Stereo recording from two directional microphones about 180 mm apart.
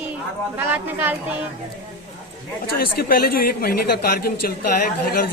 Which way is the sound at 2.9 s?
55° left (ahead or behind).